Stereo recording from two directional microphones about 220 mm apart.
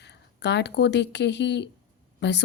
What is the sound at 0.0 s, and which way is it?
A woman's voice, 50° left (ahead or behind).